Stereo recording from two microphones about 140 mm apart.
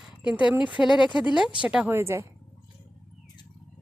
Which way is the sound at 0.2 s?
10° right (ahead or behind).